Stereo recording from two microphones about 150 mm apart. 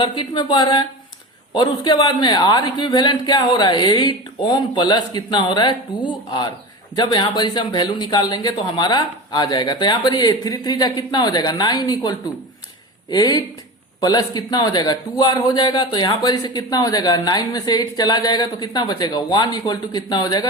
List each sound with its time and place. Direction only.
0.0 s a man's voice: 30° left (ahead or behind)